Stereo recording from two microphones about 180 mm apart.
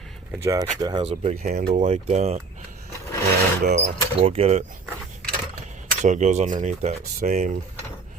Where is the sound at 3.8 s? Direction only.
35° right (ahead or behind).